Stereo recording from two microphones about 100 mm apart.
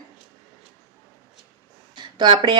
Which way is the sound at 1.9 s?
50° right (ahead or behind).